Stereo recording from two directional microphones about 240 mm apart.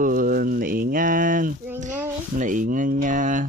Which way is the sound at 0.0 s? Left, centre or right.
Right.